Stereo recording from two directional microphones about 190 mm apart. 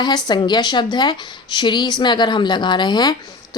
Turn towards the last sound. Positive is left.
turn(degrees=20)  # may be behind; listen again after turning